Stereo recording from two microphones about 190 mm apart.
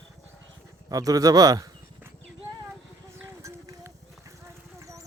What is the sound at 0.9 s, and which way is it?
Dog, 20° right (ahead or behind).